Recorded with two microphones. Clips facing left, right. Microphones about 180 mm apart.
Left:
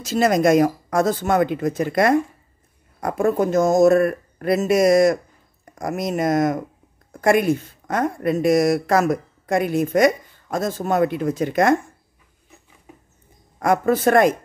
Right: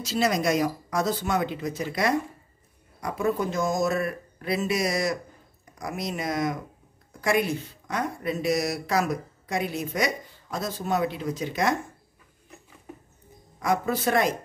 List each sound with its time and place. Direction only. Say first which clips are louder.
0.0 s speech: left 7 dB; 50° left (ahead or behind)
13.6 s speech: left 7 dB; 50° left (ahead or behind)